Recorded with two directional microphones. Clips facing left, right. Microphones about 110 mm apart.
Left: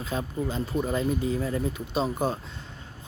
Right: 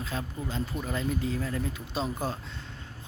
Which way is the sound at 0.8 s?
20° left (ahead or behind).